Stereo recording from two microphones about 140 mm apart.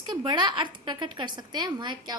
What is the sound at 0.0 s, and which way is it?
A woman's voice, 30° right (ahead or behind).